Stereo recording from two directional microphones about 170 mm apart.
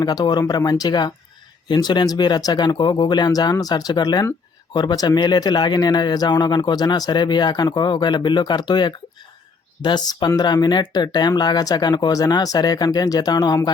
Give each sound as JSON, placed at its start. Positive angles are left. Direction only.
{"t": 0.0, "sound": "speech", "side_deg": 25}